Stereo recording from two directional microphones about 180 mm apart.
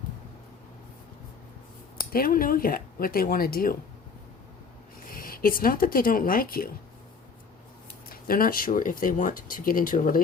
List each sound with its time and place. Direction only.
2.0 s speech: 55° left (ahead or behind)
5.0 s speech: 50° left (ahead or behind)
8.1 s speech: 55° left (ahead or behind)